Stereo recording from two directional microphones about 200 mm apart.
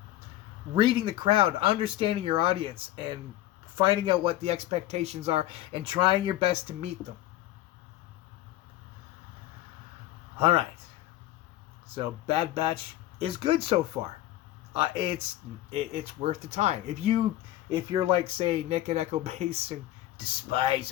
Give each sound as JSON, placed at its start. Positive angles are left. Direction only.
{"t": 0.8, "sound": "speech", "side_deg": -25}
{"t": 10.3, "sound": "speech", "side_deg": -25}
{"t": 11.9, "sound": "speech", "side_deg": -25}